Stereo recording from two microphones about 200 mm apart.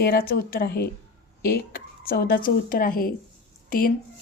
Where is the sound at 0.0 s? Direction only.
50° left (ahead or behind).